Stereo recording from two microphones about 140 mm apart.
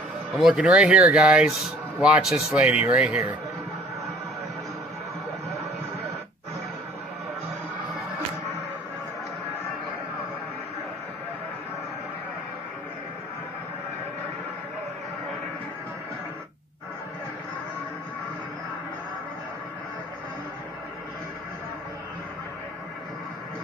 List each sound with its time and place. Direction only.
0.4 s speech: 5° right (ahead or behind)